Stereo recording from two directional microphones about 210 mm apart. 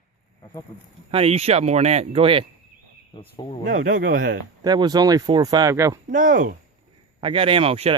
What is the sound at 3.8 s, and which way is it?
Speech, 40° right (ahead or behind).